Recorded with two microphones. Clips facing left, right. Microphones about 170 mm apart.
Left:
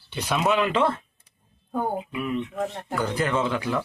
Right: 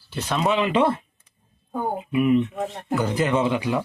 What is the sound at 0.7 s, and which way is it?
Speech, 10° right (ahead or behind).